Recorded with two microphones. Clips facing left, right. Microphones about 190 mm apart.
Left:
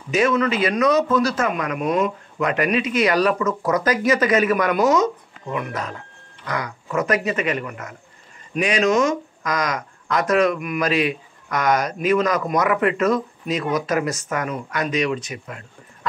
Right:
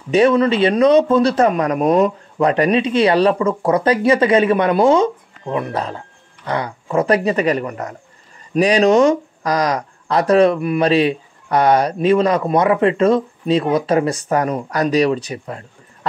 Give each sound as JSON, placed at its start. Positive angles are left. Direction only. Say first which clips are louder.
{"t": 0.1, "sound": "a man's voice", "louder": "right 6 dB", "side_deg": -35}